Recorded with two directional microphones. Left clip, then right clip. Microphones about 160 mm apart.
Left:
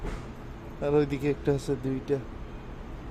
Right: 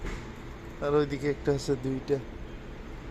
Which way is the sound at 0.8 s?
25° left (ahead or behind).